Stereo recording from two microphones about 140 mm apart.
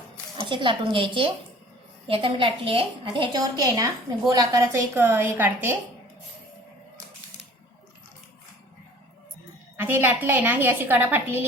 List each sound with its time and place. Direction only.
0.3 s a woman's voice: 35° right (ahead or behind)
3.6 s a woman's voice: 25° right (ahead or behind)
9.7 s a woman's voice: 15° right (ahead or behind)